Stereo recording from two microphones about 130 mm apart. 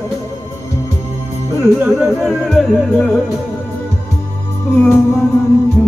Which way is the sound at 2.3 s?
Centre (ahead or behind).